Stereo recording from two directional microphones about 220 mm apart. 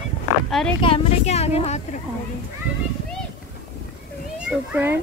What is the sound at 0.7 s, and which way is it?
Speech, 25° left (ahead or behind).